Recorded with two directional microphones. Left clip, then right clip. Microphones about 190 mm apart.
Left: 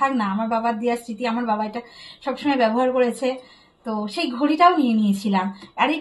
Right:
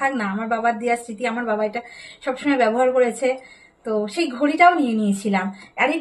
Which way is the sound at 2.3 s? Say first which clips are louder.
Right 1 dB; 25° right (ahead or behind).